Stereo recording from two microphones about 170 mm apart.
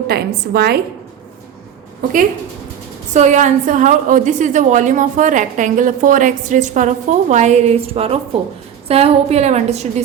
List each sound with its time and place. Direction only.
0.1 s a woman's voice: 70° right (ahead or behind)
3.1 s a woman's voice: 45° right (ahead or behind)